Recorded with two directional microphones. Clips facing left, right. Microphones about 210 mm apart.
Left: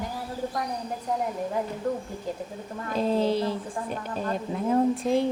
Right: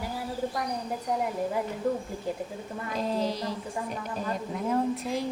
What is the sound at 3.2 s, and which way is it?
Speech, 25° left (ahead or behind).